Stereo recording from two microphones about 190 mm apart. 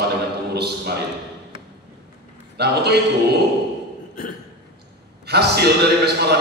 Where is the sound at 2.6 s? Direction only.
60° right (ahead or behind).